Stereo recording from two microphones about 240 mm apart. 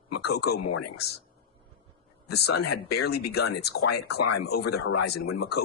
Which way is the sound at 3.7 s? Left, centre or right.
Left.